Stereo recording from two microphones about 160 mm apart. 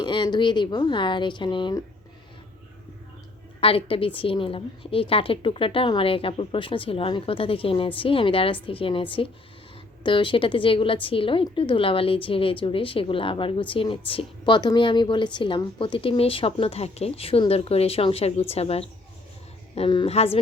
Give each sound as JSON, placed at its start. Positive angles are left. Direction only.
{"t": 0.0, "sound": "speech", "side_deg": 30}
{"t": 3.6, "sound": "a woman's voice", "side_deg": 35}